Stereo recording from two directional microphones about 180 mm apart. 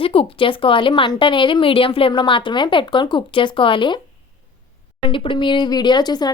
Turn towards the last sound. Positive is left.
turn(degrees=25)  # may be behind; listen again after turning